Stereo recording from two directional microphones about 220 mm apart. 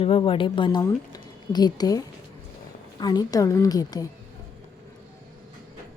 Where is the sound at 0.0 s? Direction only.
25° left (ahead or behind).